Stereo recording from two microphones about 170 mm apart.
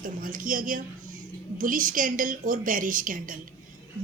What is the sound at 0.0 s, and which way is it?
A woman's voice, 55° right (ahead or behind).